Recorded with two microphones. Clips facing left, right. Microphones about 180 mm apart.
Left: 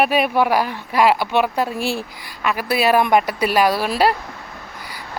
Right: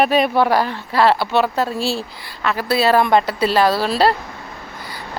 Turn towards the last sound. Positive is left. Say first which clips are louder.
# right 1 dB
turn(degrees=10)  # may be behind; listen again after turning